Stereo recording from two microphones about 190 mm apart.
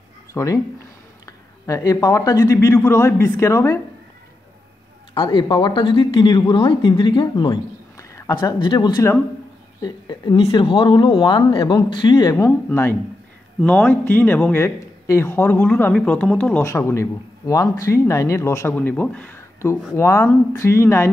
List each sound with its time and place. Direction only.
0.3 s a man's voice: 15° left (ahead or behind)
5.1 s a man's voice: 25° left (ahead or behind)